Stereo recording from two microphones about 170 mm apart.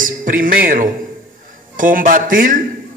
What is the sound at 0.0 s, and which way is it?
A man's voice, 55° right (ahead or behind).